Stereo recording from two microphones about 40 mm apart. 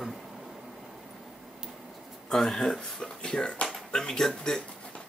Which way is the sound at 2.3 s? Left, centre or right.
Centre.